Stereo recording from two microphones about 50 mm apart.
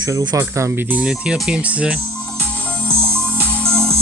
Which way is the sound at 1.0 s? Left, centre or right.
Centre.